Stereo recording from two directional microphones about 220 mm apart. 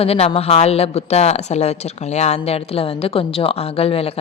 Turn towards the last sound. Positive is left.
turn(degrees=25)  # may be behind; listen again after turning